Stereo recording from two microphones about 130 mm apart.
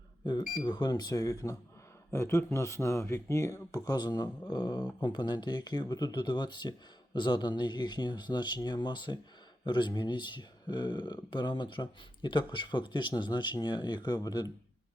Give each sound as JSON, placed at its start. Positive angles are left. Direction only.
{"t": 0.6, "sound": "speech", "side_deg": 35}